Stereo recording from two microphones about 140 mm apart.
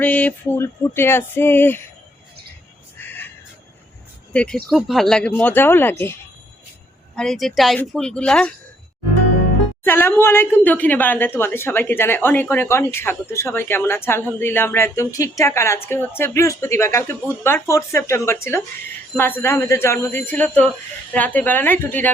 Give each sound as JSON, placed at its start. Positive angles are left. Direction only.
{"t": 0.0, "sound": "speech", "side_deg": 10}
{"t": 3.0, "sound": "a sound", "side_deg": 15}
{"t": 4.3, "sound": "speech", "side_deg": 10}
{"t": 7.2, "sound": "speech", "side_deg": 0}
{"t": 9.8, "sound": "a woman's voice", "side_deg": 15}
{"t": 19.1, "sound": "speech", "side_deg": 15}